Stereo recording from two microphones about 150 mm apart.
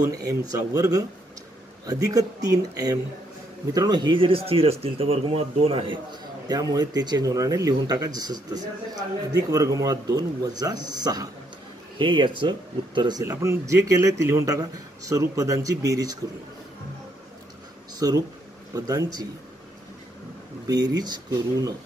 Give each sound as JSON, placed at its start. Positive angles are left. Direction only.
{"t": 0.3, "sound": "a man's voice", "side_deg": -25}
{"t": 6.4, "sound": "a man's voice", "side_deg": -25}
{"t": 13.2, "sound": "a man's voice", "side_deg": -20}
{"t": 17.9, "sound": "a man's voice", "side_deg": -25}
{"t": 20.6, "sound": "a man's voice", "side_deg": -25}